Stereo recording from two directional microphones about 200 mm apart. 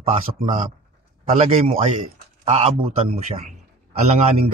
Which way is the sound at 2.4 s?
30° right (ahead or behind).